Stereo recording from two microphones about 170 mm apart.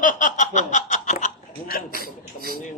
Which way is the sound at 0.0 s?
45° left (ahead or behind).